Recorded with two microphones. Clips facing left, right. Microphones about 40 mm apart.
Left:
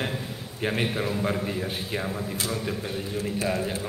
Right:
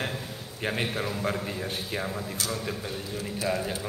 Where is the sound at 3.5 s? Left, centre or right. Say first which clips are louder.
Right 2 dB; centre.